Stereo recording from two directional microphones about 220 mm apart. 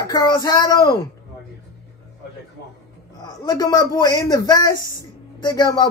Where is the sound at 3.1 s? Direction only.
20° left (ahead or behind).